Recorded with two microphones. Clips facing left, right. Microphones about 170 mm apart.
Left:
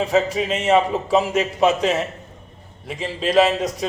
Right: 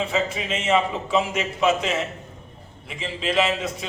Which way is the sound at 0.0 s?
40° left (ahead or behind).